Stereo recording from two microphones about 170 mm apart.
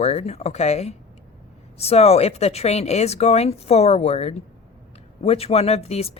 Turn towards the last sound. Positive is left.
turn(degrees=35)  # may be behind; listen again after turning